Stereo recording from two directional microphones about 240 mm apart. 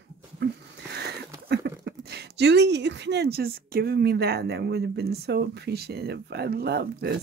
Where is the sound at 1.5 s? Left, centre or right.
Right.